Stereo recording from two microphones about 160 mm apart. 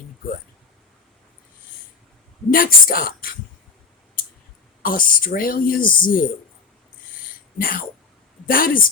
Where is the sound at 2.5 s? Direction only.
65° left (ahead or behind).